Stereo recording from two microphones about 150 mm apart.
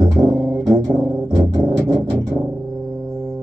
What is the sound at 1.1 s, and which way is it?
Music, 30° right (ahead or behind).